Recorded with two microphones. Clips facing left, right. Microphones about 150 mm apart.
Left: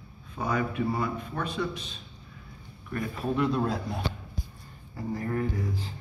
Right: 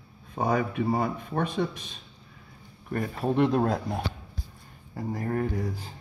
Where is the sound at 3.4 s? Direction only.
50° right (ahead or behind).